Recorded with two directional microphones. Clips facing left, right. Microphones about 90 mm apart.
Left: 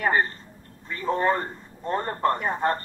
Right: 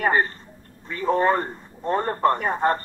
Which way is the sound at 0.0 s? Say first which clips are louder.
Right 2 dB; 25° right (ahead or behind).